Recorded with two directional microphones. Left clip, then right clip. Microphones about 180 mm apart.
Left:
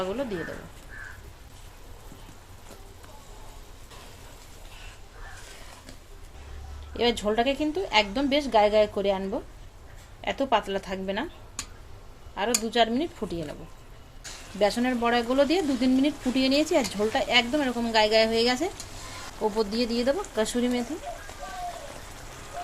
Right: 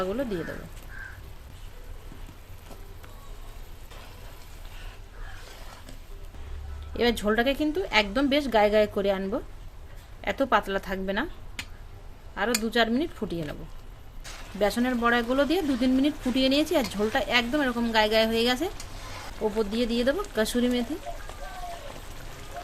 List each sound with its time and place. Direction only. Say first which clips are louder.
0.0 s a woman's voice: right 1 dB; 25° right (ahead or behind)
6.9 s a woman's voice: even; 25° right (ahead or behind)
12.3 s a woman's voice: even; 20° right (ahead or behind)
14.6 s speech: left 1 dB; 10° right (ahead or behind)